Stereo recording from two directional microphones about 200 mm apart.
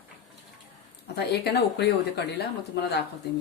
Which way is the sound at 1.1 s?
55° left (ahead or behind).